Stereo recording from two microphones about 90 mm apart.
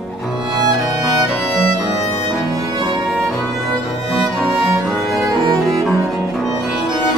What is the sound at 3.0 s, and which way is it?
Music, centre (ahead or behind).